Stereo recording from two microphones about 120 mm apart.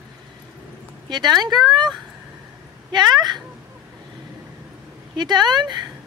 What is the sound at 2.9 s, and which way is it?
Speech, 35° right (ahead or behind).